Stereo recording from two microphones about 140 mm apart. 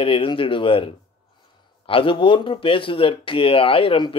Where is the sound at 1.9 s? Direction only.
40° left (ahead or behind).